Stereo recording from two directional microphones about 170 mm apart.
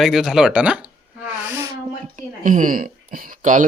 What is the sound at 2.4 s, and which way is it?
Speech, 50° right (ahead or behind).